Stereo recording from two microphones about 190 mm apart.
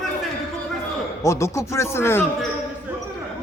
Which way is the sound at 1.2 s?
15° left (ahead or behind).